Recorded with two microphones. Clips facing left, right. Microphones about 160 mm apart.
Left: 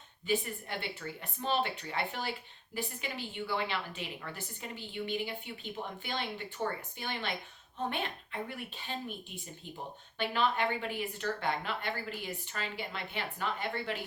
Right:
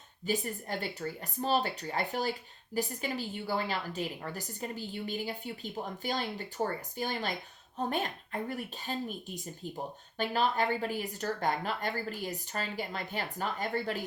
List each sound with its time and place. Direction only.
0.3 s speech: 40° right (ahead or behind)